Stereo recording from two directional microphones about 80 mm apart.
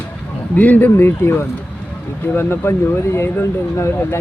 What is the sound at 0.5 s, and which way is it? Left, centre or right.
Speech, left.